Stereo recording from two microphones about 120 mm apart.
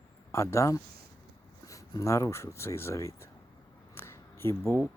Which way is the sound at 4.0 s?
20° left (ahead or behind).